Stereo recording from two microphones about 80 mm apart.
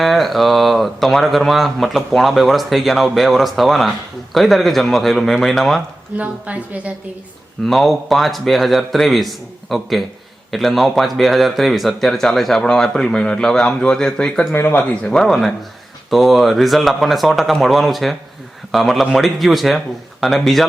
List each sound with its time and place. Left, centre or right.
0.0 s speech: centre
6.1 s a woman's voice: centre
7.6 s speech: centre
14.5 s speech: left
15.1 s speech: centre